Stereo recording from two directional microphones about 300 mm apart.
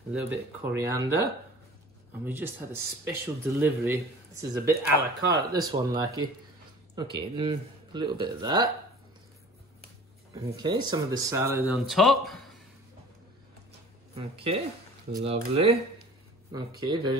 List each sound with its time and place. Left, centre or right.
0.1 s speech: centre
2.2 s speech: centre
10.3 s speech: centre
14.1 s speech: centre